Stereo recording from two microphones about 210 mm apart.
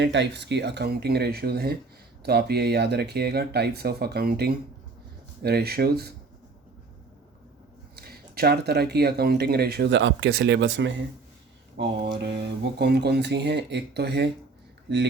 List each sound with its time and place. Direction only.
0.0 s speech: 55° right (ahead or behind)
7.9 s speech: 50° right (ahead or behind)